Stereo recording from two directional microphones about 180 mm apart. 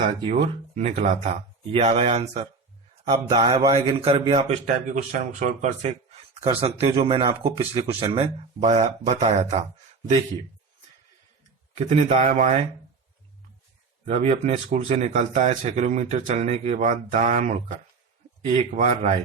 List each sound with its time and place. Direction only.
0.3 s speech: 40° right (ahead or behind)
11.7 s speech: 35° right (ahead or behind)
14.0 s speech: 35° right (ahead or behind)